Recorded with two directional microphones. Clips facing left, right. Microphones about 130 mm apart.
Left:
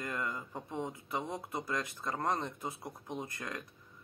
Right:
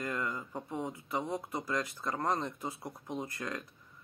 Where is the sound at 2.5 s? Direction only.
25° left (ahead or behind).